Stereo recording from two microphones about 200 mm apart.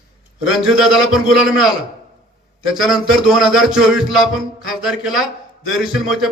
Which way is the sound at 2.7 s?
Centre (ahead or behind).